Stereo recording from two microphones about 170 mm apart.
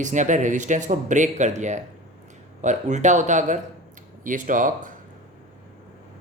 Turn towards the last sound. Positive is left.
turn(degrees=-50)  # may be behind; listen again after turning